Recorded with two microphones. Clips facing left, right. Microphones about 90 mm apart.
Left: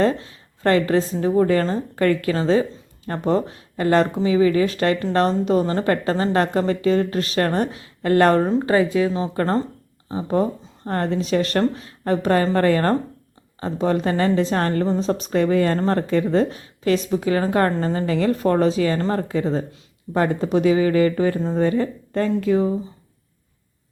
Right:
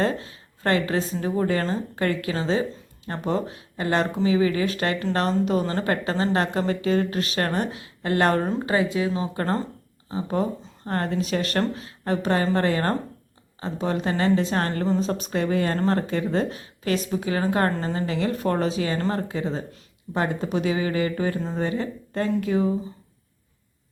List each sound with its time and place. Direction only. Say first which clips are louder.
0.0 s a woman's voice: left 5 dB; 35° left (ahead or behind)
8.4 s a woman's voice: left 6 dB; 20° left (ahead or behind)
9.0 s a woman's voice: left 5 dB; 35° left (ahead or behind)